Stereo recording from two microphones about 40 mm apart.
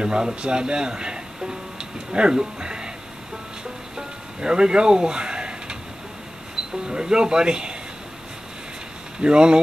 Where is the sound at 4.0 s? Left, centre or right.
Centre.